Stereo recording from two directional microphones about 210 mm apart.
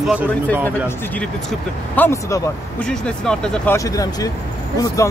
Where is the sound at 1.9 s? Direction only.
10° left (ahead or behind).